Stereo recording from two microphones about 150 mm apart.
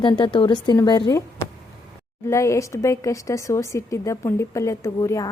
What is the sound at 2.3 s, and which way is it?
A woman's voice, 20° left (ahead or behind).